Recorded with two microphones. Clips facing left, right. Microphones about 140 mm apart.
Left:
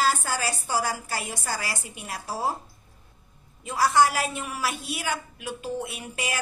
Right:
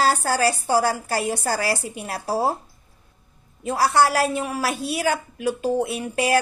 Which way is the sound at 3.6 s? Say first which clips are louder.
Right 2 dB; 40° right (ahead or behind).